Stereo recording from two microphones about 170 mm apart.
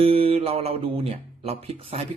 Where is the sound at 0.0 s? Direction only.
35° right (ahead or behind).